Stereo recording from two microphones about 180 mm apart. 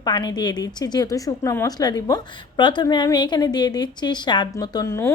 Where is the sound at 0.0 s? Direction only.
25° left (ahead or behind).